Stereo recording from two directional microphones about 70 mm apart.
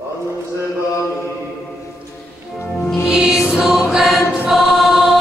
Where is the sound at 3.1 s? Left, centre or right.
Centre.